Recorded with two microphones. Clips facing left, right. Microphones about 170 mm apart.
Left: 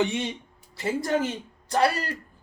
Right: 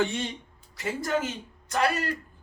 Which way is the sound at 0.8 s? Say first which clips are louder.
Left 3 dB; 30° left (ahead or behind).